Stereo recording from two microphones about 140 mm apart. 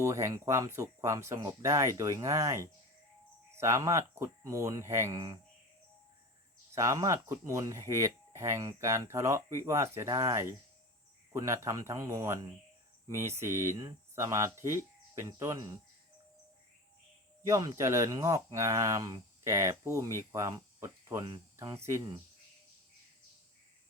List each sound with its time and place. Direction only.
0.0 s speech: 20° right (ahead or behind)
6.8 s speech: 25° right (ahead or behind)
17.5 s speech: 25° right (ahead or behind)